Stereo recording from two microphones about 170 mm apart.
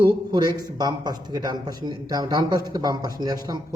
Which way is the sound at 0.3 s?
25° right (ahead or behind).